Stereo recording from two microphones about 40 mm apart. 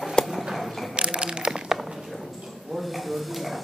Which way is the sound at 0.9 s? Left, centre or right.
Right.